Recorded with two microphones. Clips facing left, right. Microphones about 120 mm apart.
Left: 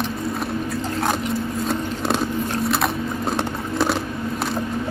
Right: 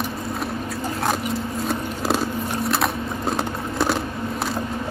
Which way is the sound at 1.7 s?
Centre (ahead or behind).